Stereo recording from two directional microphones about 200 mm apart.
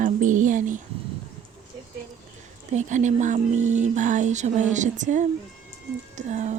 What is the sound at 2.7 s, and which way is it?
Speech, 35° right (ahead or behind).